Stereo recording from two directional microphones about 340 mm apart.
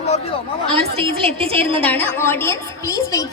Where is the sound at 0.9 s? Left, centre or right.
Centre.